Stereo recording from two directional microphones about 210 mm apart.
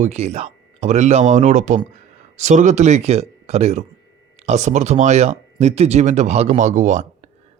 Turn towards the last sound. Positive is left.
turn(degrees=-35)  # may be behind; listen again after turning